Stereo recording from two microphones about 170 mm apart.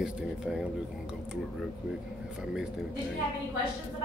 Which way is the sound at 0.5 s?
5° right (ahead or behind).